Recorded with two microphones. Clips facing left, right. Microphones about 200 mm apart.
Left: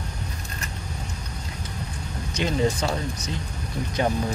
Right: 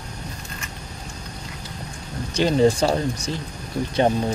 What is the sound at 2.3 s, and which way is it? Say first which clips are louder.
Speech: right 6 dB; 35° right (ahead or behind).